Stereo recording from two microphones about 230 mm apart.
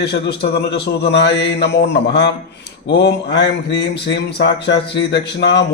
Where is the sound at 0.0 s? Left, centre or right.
Left.